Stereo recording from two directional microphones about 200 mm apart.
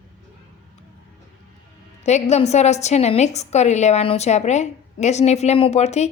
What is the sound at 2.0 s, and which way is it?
A woman's voice, 35° left (ahead or behind).